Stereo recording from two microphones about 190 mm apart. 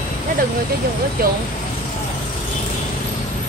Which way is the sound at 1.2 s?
55° right (ahead or behind).